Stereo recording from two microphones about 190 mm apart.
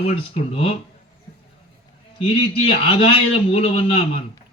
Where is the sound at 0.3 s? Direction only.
30° left (ahead or behind).